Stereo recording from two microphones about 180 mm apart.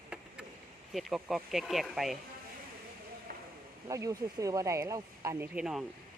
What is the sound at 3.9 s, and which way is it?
Speech, 20° right (ahead or behind).